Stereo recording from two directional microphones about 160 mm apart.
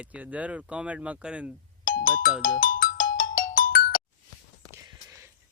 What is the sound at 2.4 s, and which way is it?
Music, 60° left (ahead or behind).